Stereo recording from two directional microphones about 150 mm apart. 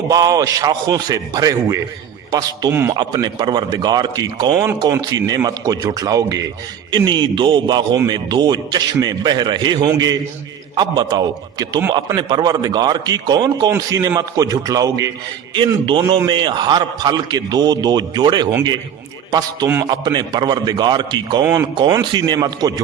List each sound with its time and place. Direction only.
0.1 s a man's voice: 25° right (ahead or behind)
19.6 s a man's voice: 15° right (ahead or behind)
19.9 s a man's voice: 30° right (ahead or behind)
21.4 s a man's voice: 15° right (ahead or behind)
22.1 s a man's voice: 30° right (ahead or behind)